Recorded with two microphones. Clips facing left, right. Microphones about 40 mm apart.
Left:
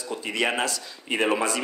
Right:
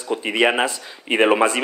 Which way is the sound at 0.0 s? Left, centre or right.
Right.